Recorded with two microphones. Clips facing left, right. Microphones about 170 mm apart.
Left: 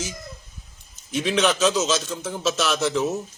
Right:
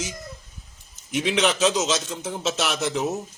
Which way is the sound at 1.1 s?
20° right (ahead or behind).